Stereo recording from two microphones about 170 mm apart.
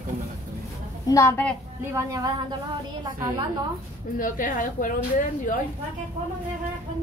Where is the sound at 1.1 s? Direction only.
15° left (ahead or behind).